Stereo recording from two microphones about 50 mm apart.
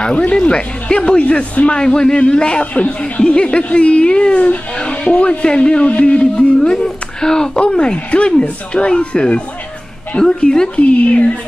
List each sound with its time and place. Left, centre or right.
0.1 s speech: left